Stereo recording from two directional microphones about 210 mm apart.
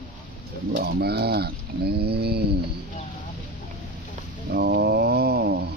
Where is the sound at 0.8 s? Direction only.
50° right (ahead or behind).